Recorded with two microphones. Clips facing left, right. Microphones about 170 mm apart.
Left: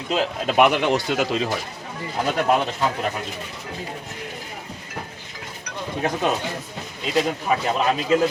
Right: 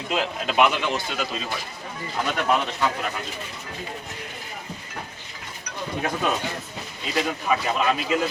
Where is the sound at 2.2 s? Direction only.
35° left (ahead or behind).